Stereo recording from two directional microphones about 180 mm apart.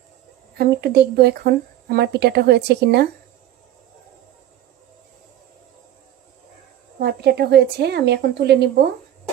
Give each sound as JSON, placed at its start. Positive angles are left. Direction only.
{"t": 0.5, "sound": "a woman's voice", "side_deg": -60}
{"t": 7.0, "sound": "a woman's voice", "side_deg": -65}